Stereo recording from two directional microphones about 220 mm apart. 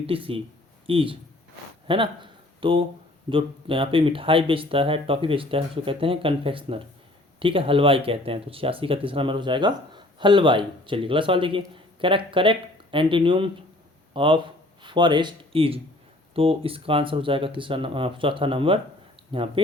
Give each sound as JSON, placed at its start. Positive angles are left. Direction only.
{"t": 0.1, "sound": "speech", "side_deg": -25}